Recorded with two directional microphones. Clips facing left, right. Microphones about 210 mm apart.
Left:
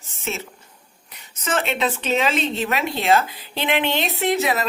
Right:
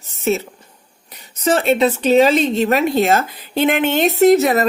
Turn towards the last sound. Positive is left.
turn(degrees=-45)  # may be behind; listen again after turning